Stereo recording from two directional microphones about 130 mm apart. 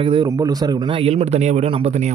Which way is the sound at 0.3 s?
30° right (ahead or behind).